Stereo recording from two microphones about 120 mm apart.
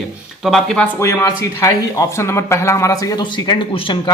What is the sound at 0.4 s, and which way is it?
Speech, 5° left (ahead or behind).